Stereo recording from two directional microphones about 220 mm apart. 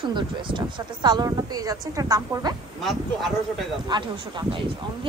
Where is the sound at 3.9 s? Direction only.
20° right (ahead or behind).